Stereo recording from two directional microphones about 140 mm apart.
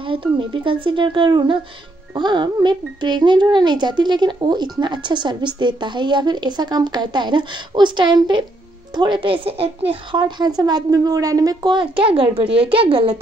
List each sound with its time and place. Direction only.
0.0 s speech: 40° right (ahead or behind)